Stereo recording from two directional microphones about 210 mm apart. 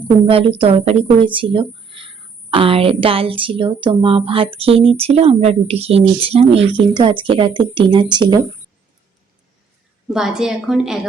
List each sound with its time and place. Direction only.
0.0 s a woman's voice: 25° right (ahead or behind)
10.1 s a woman's voice: centre (ahead or behind)